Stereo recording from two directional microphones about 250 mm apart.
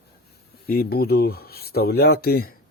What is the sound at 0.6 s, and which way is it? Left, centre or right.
Speech, left.